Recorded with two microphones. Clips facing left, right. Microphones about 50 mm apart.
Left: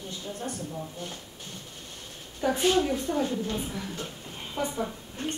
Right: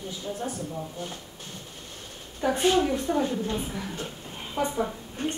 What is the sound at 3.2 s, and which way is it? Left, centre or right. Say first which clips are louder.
Speech: right 1 dB; right.